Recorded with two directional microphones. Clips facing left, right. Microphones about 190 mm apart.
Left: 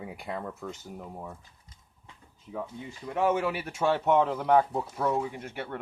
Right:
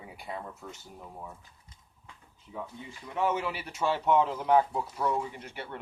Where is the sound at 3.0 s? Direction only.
50° left (ahead or behind).